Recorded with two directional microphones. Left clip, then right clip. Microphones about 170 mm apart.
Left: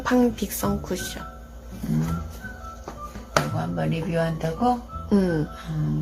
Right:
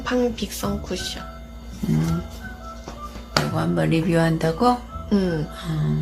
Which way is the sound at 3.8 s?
60° right (ahead or behind).